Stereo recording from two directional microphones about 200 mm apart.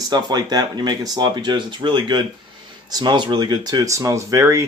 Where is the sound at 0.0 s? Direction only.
20° right (ahead or behind).